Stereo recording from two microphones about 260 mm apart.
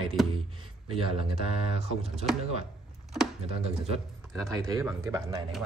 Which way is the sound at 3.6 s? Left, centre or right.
Right.